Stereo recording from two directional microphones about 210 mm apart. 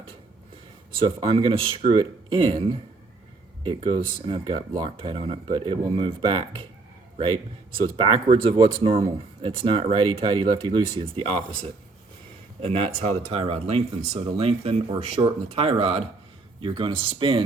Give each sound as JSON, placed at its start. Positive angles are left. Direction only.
{"t": 1.0, "sound": "speech", "side_deg": -25}
{"t": 4.9, "sound": "speech", "side_deg": -25}
{"t": 7.8, "sound": "speech", "side_deg": -25}
{"t": 12.6, "sound": "speech", "side_deg": -25}